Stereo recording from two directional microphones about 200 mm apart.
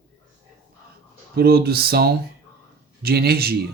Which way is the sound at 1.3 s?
50° right (ahead or behind).